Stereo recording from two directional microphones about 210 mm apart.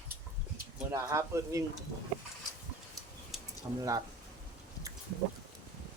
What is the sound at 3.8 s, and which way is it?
Speech, 15° right (ahead or behind).